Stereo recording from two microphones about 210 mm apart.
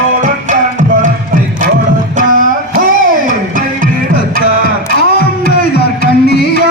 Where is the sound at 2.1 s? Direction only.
40° right (ahead or behind).